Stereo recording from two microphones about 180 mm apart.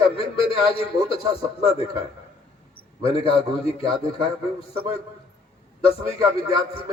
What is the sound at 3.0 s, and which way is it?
Speech, 30° left (ahead or behind).